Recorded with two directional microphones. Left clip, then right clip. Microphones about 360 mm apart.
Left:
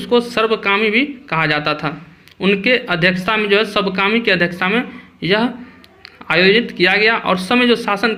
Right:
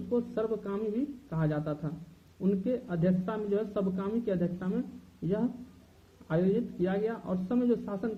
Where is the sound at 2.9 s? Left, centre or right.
Left.